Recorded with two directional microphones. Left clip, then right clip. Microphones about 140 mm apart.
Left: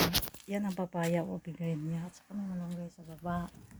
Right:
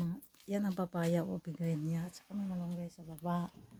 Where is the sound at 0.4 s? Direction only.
15° right (ahead or behind).